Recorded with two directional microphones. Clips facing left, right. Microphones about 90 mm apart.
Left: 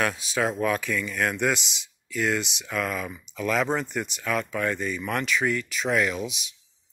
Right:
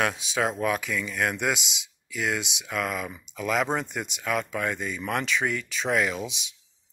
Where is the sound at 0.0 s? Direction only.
20° right (ahead or behind).